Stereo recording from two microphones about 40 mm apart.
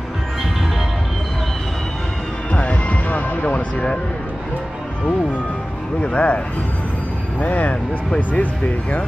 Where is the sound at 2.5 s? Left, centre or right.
Left.